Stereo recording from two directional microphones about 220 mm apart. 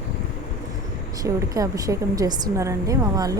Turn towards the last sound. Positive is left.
turn(degrees=-15)  # may be behind; listen again after turning